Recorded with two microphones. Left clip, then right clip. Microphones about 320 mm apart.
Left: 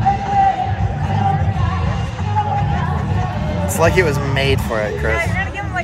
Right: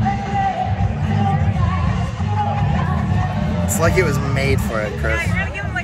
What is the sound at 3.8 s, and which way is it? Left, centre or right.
Speech, centre.